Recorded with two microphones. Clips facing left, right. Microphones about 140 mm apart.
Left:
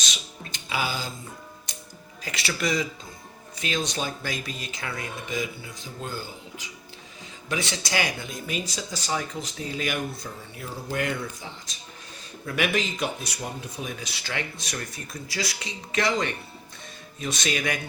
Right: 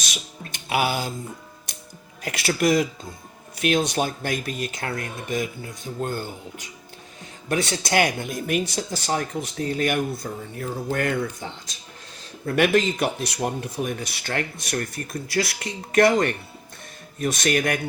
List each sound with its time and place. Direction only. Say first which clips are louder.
0.0 s a sound: right 2 dB; 55° right (ahead or behind)
2.2 s speech: right 7 dB; 55° right (ahead or behind)
10.3 s speech: right 7 dB; 45° right (ahead or behind)